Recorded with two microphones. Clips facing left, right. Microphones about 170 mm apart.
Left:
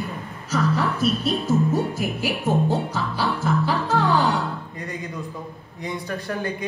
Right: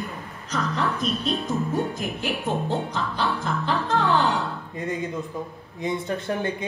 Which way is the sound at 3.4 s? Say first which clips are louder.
Left 3 dB; 5° left (ahead or behind).